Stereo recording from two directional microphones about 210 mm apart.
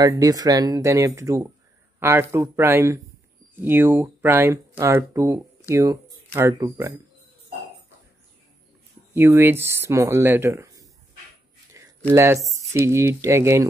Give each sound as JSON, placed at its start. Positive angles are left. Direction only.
{"t": 0.0, "sound": "speech", "side_deg": -15}
{"t": 9.1, "sound": "speech", "side_deg": -10}
{"t": 11.7, "sound": "a sound", "side_deg": -15}
{"t": 12.1, "sound": "speech", "side_deg": -10}